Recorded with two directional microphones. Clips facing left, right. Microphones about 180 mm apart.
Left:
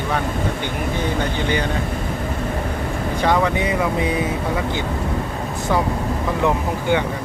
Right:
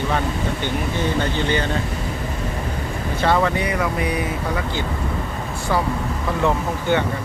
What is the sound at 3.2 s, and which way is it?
Speech, 15° left (ahead or behind).